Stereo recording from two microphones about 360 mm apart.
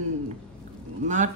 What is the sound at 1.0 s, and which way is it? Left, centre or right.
Speech, centre.